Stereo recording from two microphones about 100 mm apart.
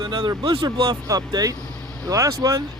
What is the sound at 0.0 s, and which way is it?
Speech, 50° right (ahead or behind).